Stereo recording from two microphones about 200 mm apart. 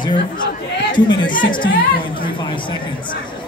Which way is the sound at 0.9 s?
25° left (ahead or behind).